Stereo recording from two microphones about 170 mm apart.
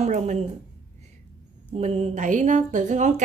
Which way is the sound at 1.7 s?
40° right (ahead or behind).